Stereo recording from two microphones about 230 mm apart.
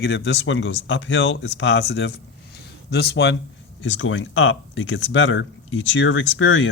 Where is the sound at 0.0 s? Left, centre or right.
Left.